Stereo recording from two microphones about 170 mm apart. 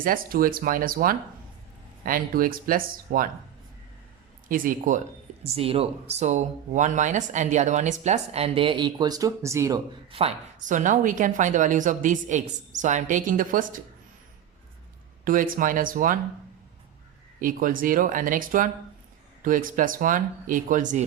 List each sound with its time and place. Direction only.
0.0 s speech: 55° right (ahead or behind)
4.4 s a woman's voice: 55° right (ahead or behind)
5.4 s speech: 35° right (ahead or behind); by 9.8 s 20° right (ahead or behind)
10.1 s speech: 35° right (ahead or behind)
10.6 s a woman's voice: 50° right (ahead or behind)
15.2 s a woman's voice: 55° right (ahead or behind)
17.4 s a woman's voice: 55° right (ahead or behind)